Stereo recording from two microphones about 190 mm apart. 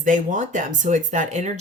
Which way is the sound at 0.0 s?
40° right (ahead or behind).